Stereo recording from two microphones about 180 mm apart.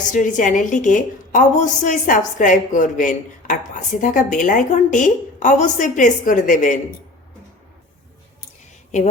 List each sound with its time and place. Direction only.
0.1 s a woman's voice: 45° left (ahead or behind)